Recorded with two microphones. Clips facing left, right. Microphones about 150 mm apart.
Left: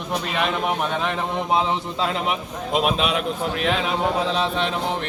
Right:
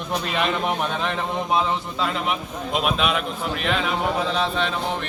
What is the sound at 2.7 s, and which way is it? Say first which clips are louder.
Speech: left 2 dB; 35° left (ahead or behind).